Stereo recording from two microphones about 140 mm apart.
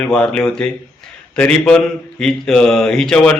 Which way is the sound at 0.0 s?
5° left (ahead or behind).